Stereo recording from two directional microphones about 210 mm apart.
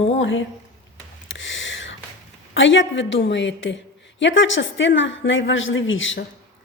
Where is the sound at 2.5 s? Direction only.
60° left (ahead or behind).